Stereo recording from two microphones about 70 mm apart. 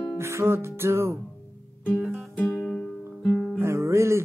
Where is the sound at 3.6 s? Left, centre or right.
Right.